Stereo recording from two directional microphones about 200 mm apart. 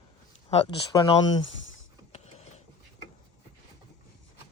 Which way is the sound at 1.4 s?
70° left (ahead or behind).